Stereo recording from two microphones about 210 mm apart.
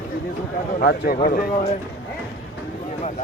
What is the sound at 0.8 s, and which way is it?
Speech, 45° left (ahead or behind).